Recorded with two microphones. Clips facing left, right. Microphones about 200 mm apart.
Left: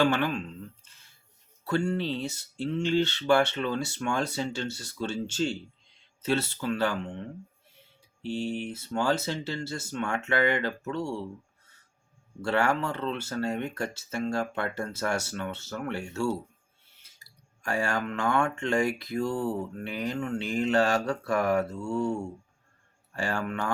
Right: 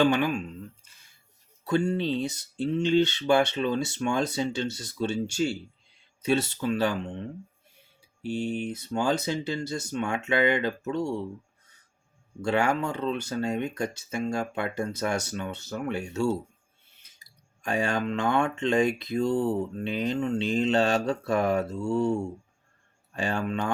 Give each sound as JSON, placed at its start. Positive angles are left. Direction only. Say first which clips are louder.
{"t": 0.0, "sound": "speech", "louder": "right 2 dB", "side_deg": -15}
{"t": 12.4, "sound": "speech", "louder": "right 1 dB", "side_deg": -15}
{"t": 23.1, "sound": "speech", "louder": "right 2 dB", "side_deg": -20}